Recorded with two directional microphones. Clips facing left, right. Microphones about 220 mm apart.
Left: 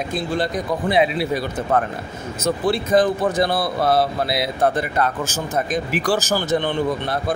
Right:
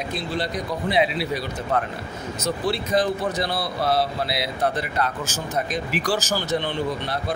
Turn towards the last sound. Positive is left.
turn(degrees=50)  # may be behind; listen again after turning